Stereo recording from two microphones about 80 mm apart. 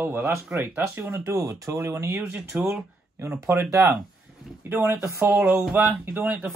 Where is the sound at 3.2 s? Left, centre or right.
Right.